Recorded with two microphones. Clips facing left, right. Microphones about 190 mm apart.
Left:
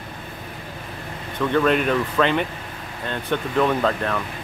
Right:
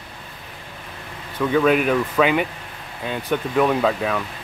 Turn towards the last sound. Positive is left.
turn(degrees=-5)  # may be behind; listen again after turning